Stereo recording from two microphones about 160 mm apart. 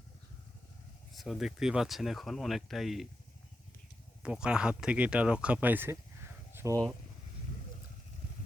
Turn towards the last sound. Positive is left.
turn(degrees=-15)  # may be behind; listen again after turning